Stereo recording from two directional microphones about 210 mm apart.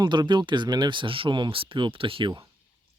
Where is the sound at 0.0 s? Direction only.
20° right (ahead or behind).